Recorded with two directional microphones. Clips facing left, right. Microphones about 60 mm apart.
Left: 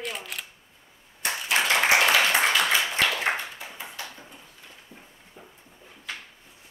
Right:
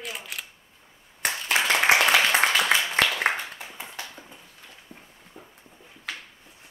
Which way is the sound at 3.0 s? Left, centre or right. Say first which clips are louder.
Right 2 dB; right.